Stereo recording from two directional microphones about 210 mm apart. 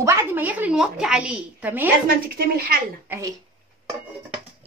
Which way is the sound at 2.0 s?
45° right (ahead or behind).